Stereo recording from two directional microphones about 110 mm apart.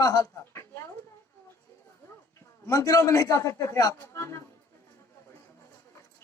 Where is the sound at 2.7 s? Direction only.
30° left (ahead or behind).